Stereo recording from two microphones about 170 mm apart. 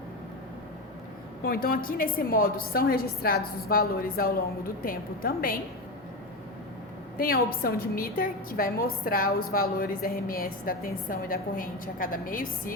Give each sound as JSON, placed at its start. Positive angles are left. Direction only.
{"t": 1.5, "sound": "a woman's voice", "side_deg": 60}
{"t": 7.2, "sound": "a woman's voice", "side_deg": 60}